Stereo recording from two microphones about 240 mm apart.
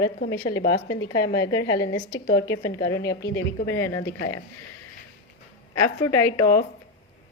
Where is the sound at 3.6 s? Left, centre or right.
Centre.